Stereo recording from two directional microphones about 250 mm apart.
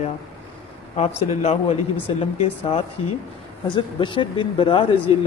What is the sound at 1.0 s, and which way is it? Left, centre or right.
A man's voice, left.